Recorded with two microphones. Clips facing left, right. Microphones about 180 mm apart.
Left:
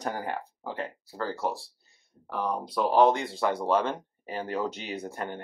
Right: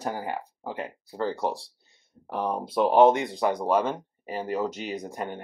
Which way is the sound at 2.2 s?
25° right (ahead or behind).